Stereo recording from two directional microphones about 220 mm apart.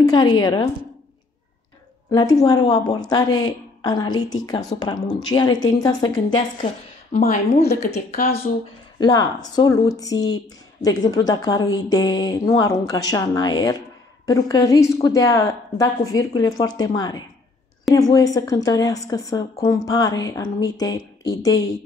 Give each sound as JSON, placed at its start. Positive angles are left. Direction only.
{"t": 0.0, "sound": "a woman's voice", "side_deg": 20}
{"t": 2.0, "sound": "a woman's voice", "side_deg": 15}
{"t": 9.0, "sound": "a woman's voice", "side_deg": 15}